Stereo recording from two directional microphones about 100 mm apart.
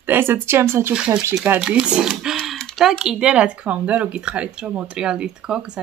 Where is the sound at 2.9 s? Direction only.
5° right (ahead or behind).